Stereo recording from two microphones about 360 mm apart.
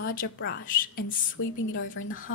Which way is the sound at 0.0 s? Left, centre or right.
Left.